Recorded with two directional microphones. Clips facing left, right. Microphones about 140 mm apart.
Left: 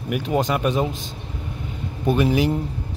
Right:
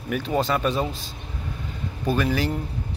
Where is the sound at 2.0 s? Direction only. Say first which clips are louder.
Left 4 dB; 20° left (ahead or behind).